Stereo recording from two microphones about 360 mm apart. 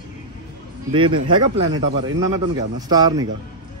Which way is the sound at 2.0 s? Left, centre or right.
Right.